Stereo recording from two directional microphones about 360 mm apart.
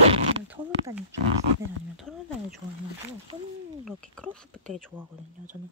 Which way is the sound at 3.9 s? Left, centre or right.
Centre.